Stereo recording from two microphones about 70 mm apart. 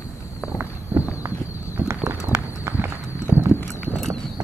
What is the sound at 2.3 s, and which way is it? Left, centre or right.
Run, right.